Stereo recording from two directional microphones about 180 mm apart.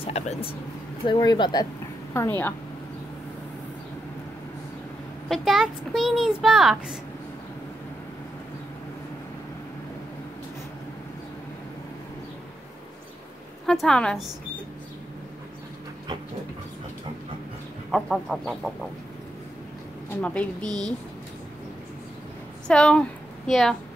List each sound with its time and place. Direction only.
0.0 s speech: 35° left (ahead or behind)
1.0 s speech: 25° left (ahead or behind)
2.1 s a woman's voice: 10° left (ahead or behind)
5.3 s a child's voice: centre (ahead or behind)
13.7 s a child's voice: 5° left (ahead or behind)
17.9 s a child's voice: centre (ahead or behind)
20.2 s a woman's voice: 5° left (ahead or behind)
22.7 s a woman's voice: 5° left (ahead or behind)